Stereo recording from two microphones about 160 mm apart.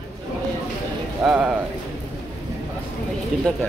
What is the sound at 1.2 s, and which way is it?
Speech, 5° right (ahead or behind).